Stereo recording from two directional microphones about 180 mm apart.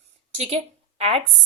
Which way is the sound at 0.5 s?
35° right (ahead or behind).